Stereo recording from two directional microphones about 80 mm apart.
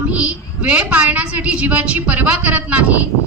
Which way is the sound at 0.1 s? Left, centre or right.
Centre.